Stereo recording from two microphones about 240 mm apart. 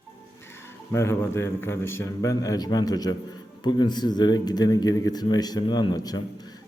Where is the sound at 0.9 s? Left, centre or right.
Centre.